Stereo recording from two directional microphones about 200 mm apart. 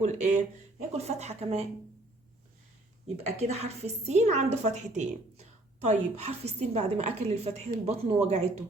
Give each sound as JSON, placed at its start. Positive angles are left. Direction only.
{"t": 0.0, "sound": "a woman's voice", "side_deg": -40}
{"t": 3.2, "sound": "a woman's voice", "side_deg": -30}